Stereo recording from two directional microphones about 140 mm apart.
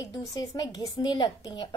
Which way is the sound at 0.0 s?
25° left (ahead or behind).